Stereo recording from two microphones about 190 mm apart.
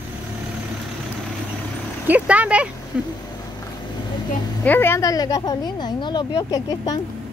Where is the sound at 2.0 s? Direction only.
10° right (ahead or behind).